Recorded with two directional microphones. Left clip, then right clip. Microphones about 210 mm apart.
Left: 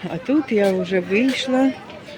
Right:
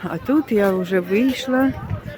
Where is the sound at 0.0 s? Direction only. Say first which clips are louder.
Right 1 dB; 10° right (ahead or behind).